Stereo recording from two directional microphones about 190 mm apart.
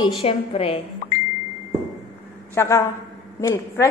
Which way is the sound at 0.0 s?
30° left (ahead or behind).